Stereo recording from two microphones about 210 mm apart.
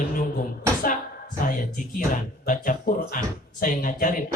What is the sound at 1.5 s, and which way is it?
Speech, 40° left (ahead or behind).